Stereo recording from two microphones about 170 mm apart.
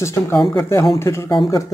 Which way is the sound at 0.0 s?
15° left (ahead or behind).